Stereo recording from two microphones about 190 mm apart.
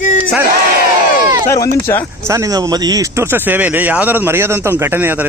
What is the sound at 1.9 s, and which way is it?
Speech, 15° left (ahead or behind).